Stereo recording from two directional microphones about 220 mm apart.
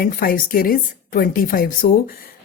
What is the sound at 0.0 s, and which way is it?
Speech, 40° left (ahead or behind).